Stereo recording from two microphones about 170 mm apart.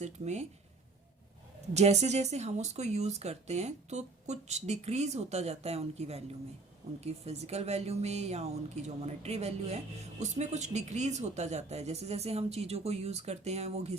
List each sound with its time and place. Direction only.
0.0 s speech: 40° right (ahead or behind)
1.7 s speech: 40° right (ahead or behind)